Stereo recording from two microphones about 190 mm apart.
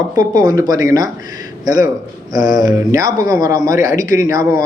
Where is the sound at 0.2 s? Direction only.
20° right (ahead or behind).